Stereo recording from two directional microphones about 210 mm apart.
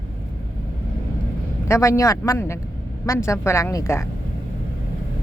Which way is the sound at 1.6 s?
15° left (ahead or behind).